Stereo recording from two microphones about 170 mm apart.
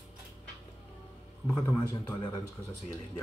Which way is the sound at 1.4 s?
25° left (ahead or behind).